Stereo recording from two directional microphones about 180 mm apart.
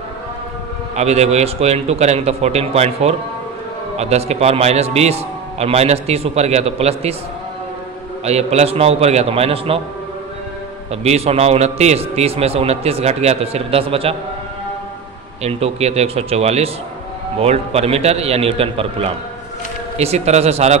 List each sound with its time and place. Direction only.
0.9 s a man's voice: 35° right (ahead or behind)
8.3 s a man's voice: 35° right (ahead or behind)
10.9 s a man's voice: 35° right (ahead or behind)
15.4 s a man's voice: 35° right (ahead or behind)